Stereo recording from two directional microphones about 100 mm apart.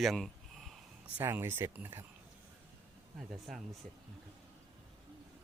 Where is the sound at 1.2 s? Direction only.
25° right (ahead or behind).